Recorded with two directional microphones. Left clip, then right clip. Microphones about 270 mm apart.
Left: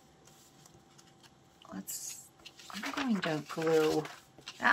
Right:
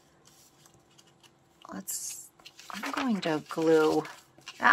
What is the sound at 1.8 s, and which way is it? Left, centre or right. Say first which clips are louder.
Speech: right 4 dB; centre.